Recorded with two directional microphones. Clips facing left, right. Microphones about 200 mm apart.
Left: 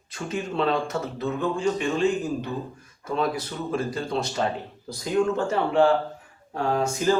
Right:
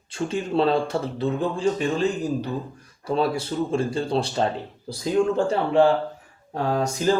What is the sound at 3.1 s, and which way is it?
Speech, 30° right (ahead or behind).